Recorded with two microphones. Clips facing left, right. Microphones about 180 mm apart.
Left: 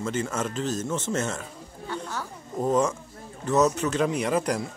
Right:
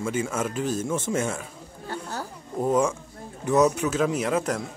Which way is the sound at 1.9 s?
40° right (ahead or behind).